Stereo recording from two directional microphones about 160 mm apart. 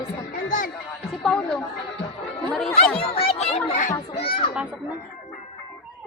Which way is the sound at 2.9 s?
35° left (ahead or behind).